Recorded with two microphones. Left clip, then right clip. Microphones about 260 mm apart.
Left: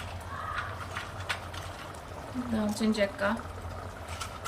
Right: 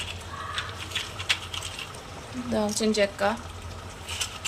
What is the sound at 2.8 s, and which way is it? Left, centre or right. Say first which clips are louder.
Speech: right 4 dB; centre.